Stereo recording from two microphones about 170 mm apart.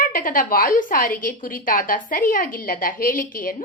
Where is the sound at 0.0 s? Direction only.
55° left (ahead or behind).